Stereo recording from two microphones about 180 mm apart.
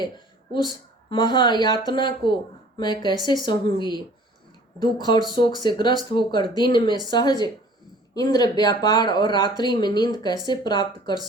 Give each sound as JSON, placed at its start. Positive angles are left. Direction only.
{"t": 0.5, "sound": "speech", "side_deg": 25}